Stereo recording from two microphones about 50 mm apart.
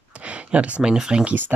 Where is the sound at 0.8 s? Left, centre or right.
Centre.